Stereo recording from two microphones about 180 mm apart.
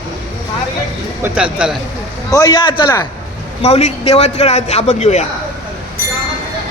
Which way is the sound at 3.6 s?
35° left (ahead or behind).